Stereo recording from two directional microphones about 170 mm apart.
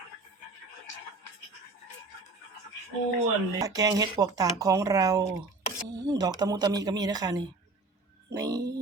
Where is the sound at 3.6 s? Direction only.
20° right (ahead or behind).